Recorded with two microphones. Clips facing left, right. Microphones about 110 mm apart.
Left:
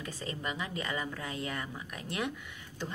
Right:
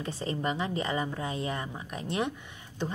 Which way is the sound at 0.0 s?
30° right (ahead or behind).